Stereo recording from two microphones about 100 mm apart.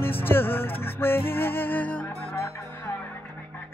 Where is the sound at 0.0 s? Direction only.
20° left (ahead or behind).